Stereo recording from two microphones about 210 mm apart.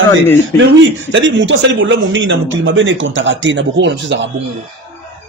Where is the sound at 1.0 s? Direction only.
65° right (ahead or behind).